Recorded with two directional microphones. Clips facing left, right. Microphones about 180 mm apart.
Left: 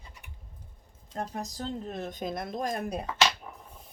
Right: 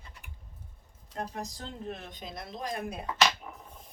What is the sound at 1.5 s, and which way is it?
Speech, 40° left (ahead or behind).